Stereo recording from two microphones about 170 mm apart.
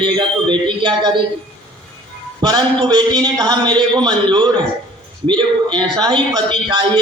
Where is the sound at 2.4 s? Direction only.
25° right (ahead or behind).